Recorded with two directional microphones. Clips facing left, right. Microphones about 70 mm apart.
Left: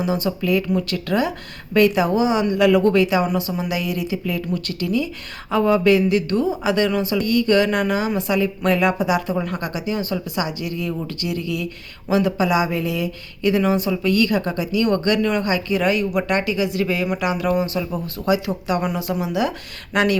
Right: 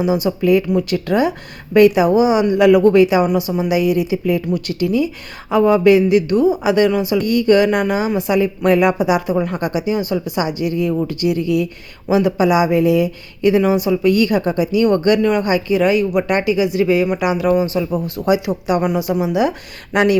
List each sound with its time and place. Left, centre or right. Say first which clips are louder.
0.0 s a woman's voice: right 5 dB; centre
18.0 s a woman's voice: right 4 dB; centre